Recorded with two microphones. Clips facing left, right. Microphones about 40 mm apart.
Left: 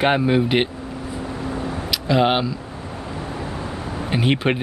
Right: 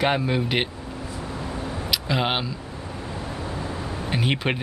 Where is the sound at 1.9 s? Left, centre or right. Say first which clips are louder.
Left 6 dB; centre.